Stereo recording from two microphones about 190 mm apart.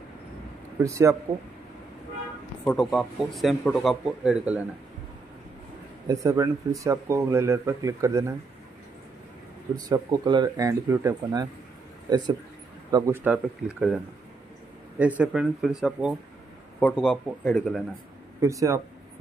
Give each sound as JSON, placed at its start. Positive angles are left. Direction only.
{"t": 0.8, "sound": "speech", "side_deg": -15}
{"t": 2.6, "sound": "speech", "side_deg": 5}
{"t": 6.0, "sound": "speech", "side_deg": -15}
{"t": 9.8, "sound": "speech", "side_deg": -20}
{"t": 15.0, "sound": "speech", "side_deg": -5}
{"t": 18.4, "sound": "speech", "side_deg": -15}